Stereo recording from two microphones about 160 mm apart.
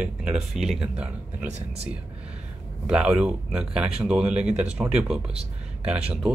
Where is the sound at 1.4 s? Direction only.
45° right (ahead or behind).